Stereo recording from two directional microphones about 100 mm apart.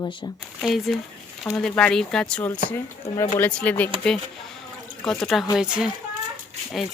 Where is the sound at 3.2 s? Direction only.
25° left (ahead or behind).